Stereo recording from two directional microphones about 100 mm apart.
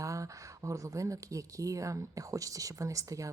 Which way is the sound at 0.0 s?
35° right (ahead or behind).